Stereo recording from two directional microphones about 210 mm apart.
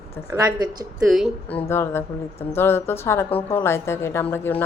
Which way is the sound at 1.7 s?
10° left (ahead or behind).